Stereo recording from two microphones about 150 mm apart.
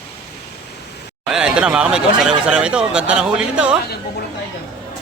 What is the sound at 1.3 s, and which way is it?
Speech, 5° right (ahead or behind).